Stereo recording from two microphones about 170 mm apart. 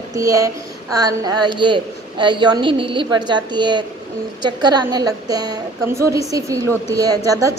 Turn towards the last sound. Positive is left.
turn(degrees=-20)  # may be behind; listen again after turning